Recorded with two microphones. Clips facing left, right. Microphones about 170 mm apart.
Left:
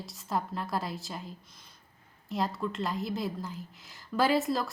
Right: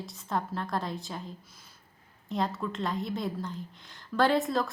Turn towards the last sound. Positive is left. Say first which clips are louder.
# right 1 dB
turn(degrees=0)  # may be behind; listen again after turning